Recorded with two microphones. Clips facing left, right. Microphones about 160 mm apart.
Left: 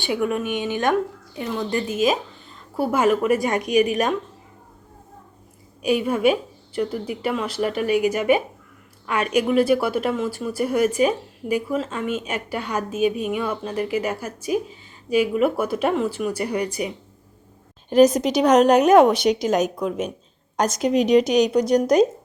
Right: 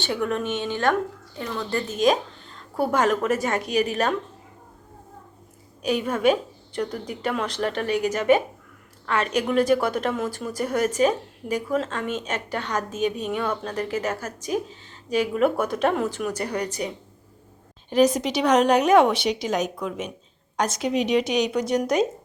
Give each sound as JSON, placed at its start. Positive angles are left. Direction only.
{"t": 0.0, "sound": "a woman's voice", "side_deg": 10}
{"t": 5.8, "sound": "a woman's voice", "side_deg": 10}
{"t": 17.8, "sound": "a woman's voice", "side_deg": 45}